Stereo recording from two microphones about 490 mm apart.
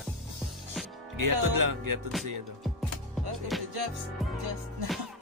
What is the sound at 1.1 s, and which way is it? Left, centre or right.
Speech, right.